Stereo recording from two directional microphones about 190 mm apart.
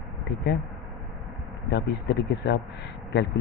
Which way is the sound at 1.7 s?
65° left (ahead or behind).